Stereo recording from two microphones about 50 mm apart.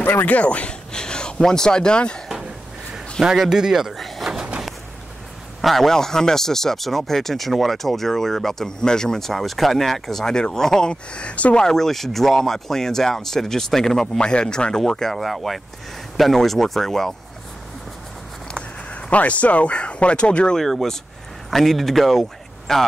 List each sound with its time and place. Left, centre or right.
0.0 s speech: left
0.4 s speech: left
3.2 s speech: centre
3.9 s sliding door: centre
4.3 s a sound: centre
5.6 s speech: centre; by 11.6 s left
11.6 s speech: centre
18.5 s speech: left
20.5 s speech: centre